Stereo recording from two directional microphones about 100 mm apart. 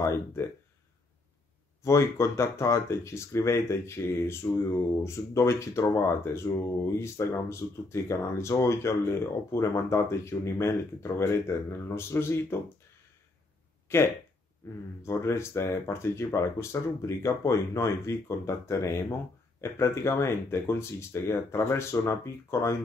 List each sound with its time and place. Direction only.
0.0 s speech: 30° left (ahead or behind)
1.8 s speech: 30° left (ahead or behind)
13.9 s speech: 25° left (ahead or behind)